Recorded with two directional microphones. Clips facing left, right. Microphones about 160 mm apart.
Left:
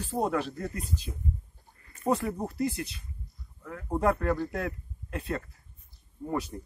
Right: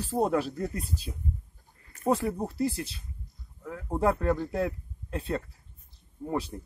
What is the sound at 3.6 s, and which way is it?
Speech, 15° right (ahead or behind).